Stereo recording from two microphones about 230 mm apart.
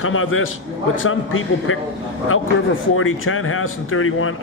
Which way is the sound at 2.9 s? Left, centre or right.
Left.